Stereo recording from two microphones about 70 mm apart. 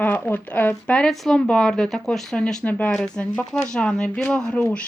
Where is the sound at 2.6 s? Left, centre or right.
Centre.